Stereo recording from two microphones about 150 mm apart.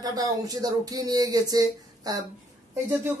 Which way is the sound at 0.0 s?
25° right (ahead or behind).